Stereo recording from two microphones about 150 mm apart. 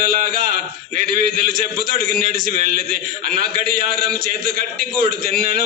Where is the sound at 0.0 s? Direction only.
70° right (ahead or behind).